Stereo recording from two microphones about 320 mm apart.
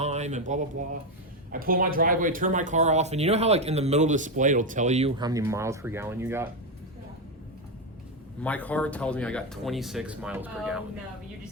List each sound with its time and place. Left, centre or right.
0.0 s speech: right
8.4 s speech: centre